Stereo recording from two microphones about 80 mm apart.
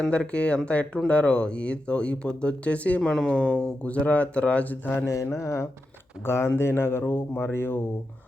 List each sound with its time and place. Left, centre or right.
0.0 s speech: centre
3.0 s speech: centre; by 5.0 s left
5.0 s speech: left